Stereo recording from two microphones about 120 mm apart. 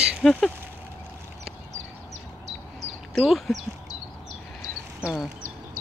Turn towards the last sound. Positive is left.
turn(degrees=-5)  # may be behind; listen again after turning